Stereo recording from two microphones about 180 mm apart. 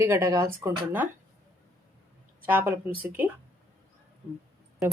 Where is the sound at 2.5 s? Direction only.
10° right (ahead or behind).